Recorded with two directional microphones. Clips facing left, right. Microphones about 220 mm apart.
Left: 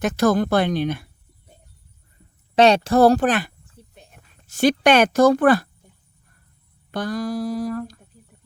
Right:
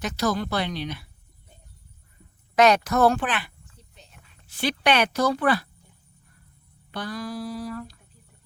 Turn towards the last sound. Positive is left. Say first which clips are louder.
# left 7 dB
turn(degrees=45)  # may be behind; listen again after turning